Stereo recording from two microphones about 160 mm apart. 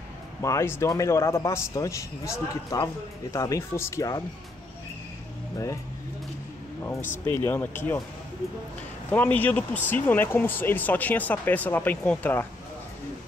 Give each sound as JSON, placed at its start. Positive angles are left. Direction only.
{"t": 0.4, "sound": "a man's voice", "side_deg": 20}
{"t": 7.2, "sound": "speech", "side_deg": 15}
{"t": 9.1, "sound": "speech", "side_deg": 10}